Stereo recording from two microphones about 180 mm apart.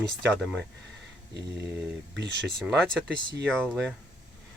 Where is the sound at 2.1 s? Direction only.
75° right (ahead or behind).